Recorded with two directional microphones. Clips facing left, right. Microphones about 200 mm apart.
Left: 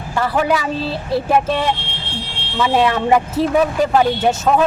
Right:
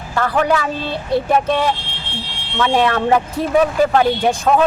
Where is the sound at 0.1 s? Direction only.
5° left (ahead or behind).